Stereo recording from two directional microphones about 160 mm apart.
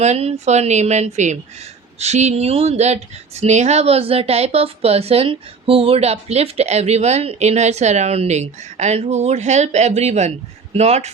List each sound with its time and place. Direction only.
0.0 s speech: 40° right (ahead or behind)